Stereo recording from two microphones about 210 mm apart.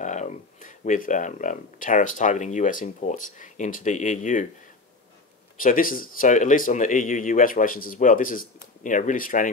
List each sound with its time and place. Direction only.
0.0 s speech: 35° left (ahead or behind)
5.6 s speech: 40° left (ahead or behind)